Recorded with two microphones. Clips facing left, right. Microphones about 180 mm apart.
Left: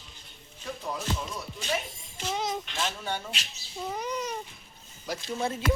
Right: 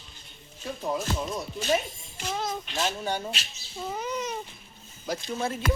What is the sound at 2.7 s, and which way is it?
Speech, 40° right (ahead or behind).